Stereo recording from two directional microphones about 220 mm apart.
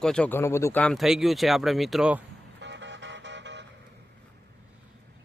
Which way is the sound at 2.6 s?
55° right (ahead or behind).